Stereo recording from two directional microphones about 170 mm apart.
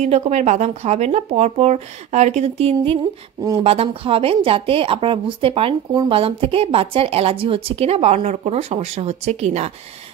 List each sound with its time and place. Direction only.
0.0 s a woman's voice: 40° right (ahead or behind)